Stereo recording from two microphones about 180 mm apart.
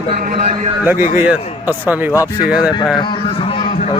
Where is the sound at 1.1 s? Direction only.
10° right (ahead or behind).